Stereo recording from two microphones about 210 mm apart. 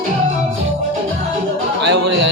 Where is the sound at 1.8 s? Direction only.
60° right (ahead or behind).